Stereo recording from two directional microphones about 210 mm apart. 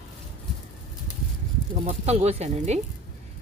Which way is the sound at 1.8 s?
30° right (ahead or behind).